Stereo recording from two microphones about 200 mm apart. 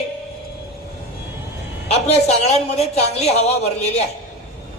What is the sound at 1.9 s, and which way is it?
A man's voice, 30° left (ahead or behind).